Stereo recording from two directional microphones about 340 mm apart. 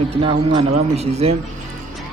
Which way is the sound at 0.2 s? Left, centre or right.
Centre.